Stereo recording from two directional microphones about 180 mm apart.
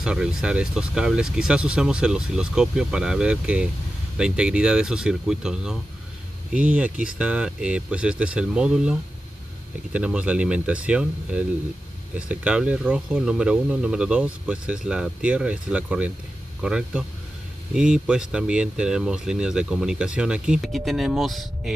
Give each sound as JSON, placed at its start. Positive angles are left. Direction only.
{"t": 0.0, "sound": "speech", "side_deg": -5}
{"t": 9.9, "sound": "speech", "side_deg": -5}